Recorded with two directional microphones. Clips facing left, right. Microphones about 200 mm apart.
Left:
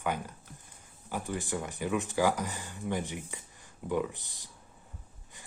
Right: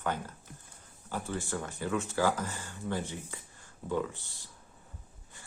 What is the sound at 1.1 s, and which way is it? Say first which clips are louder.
Speech: left 1 dB; 15° left (ahead or behind).